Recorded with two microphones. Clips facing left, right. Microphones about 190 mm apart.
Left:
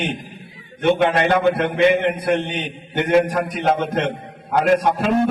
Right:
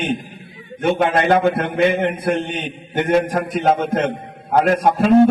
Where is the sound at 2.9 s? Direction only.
50° right (ahead or behind).